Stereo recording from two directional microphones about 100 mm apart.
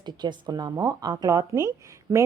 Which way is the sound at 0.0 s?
45° right (ahead or behind).